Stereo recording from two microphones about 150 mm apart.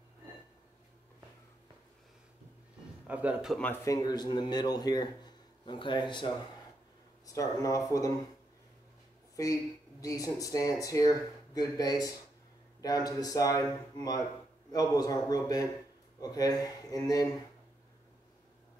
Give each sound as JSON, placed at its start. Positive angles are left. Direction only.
{"t": 3.1, "sound": "a man's voice", "side_deg": -10}
{"t": 3.8, "sound": "speech", "side_deg": 25}
{"t": 9.4, "sound": "speech", "side_deg": 25}